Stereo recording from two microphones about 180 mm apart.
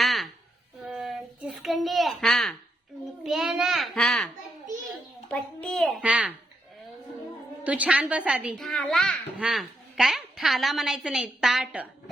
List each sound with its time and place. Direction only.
0.0 s a sound: centre (ahead or behind)
0.9 s child singing: 5° right (ahead or behind)
3.2 s a child's voice: centre (ahead or behind)
5.3 s a child's voice: 5° left (ahead or behind)
7.6 s a child's voice: 10° right (ahead or behind)